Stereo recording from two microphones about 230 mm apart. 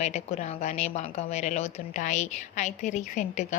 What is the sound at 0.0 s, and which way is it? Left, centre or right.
A woman's voice, left.